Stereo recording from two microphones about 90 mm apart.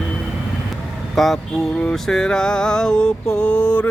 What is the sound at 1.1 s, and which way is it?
Speech, 5° left (ahead or behind).